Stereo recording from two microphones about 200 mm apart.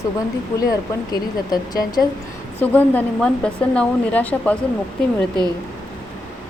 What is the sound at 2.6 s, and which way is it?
A woman's voice, 10° left (ahead or behind).